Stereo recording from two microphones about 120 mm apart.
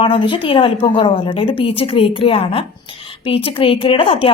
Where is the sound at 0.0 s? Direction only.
50° left (ahead or behind).